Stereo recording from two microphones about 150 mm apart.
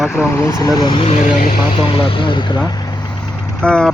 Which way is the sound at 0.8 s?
30° left (ahead or behind).